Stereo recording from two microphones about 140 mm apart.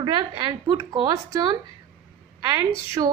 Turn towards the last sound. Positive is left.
turn(degrees=-30)  # may be behind; listen again after turning